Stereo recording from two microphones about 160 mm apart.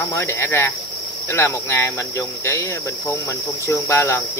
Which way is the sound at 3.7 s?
20° left (ahead or behind).